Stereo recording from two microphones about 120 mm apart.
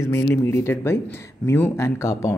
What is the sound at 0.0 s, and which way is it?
Speech, 20° left (ahead or behind).